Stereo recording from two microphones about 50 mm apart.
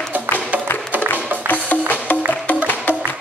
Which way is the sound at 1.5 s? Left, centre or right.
Left.